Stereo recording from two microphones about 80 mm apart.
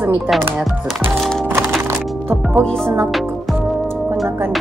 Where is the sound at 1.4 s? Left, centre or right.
Right.